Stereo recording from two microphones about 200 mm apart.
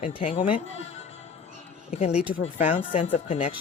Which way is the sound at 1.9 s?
35° left (ahead or behind).